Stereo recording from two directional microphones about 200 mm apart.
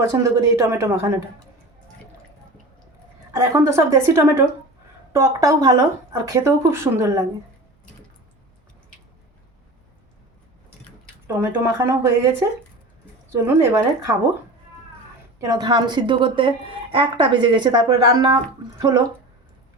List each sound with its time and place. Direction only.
0.0 s speech: 15° right (ahead or behind)
3.5 s speech: 15° right (ahead or behind)
11.3 s speech: 10° right (ahead or behind)
15.4 s a woman's voice: 20° right (ahead or behind)